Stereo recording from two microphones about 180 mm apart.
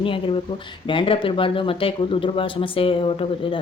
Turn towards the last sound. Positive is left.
turn(degrees=30)  # may be behind; listen again after turning